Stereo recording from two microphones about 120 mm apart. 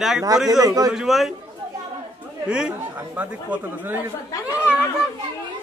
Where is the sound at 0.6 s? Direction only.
30° right (ahead or behind).